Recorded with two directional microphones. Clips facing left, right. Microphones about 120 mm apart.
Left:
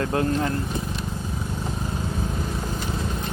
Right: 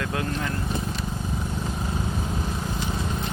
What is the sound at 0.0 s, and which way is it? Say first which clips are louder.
Speech: left 5 dB; 35° left (ahead or behind).